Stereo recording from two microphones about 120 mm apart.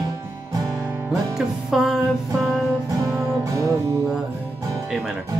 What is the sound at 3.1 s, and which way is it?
Music, 30° right (ahead or behind).